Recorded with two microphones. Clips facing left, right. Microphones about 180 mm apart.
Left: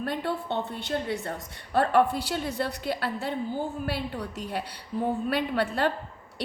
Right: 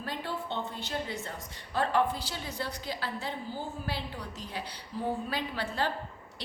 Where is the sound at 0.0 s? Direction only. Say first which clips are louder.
Left 6 dB; 60° left (ahead or behind).